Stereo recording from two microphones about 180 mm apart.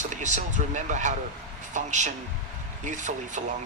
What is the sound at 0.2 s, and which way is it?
Speech, 40° right (ahead or behind).